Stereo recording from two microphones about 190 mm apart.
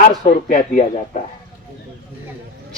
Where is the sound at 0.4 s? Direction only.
40° left (ahead or behind).